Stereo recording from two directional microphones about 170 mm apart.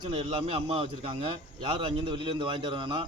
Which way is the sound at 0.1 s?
30° right (ahead or behind).